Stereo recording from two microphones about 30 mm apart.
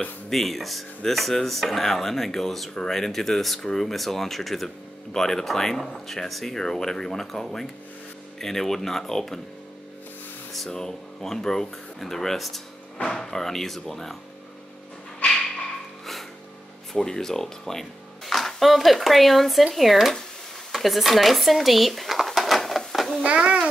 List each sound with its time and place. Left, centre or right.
0.3 s speech: centre
6.5 s speech: centre
10.7 s speech: centre
13.1 s speech: centre
16.9 s speech: centre
18.2 s music: centre
18.7 s speech: centre
20.7 s a sound: centre
23.2 s a child's voice: right